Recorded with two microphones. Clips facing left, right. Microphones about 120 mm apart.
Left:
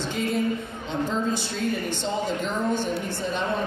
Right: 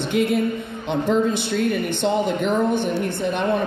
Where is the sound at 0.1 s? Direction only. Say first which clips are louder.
Right 6 dB; 65° right (ahead or behind).